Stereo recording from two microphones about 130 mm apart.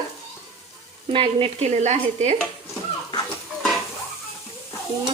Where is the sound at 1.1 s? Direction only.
45° right (ahead or behind); by 2.3 s 60° right (ahead or behind).